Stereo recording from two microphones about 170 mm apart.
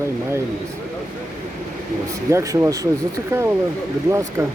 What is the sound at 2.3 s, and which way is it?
Speech, 20° right (ahead or behind).